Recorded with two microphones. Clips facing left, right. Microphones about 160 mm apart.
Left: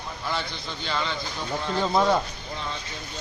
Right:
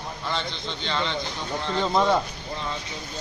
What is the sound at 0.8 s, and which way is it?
Speech, 10° left (ahead or behind).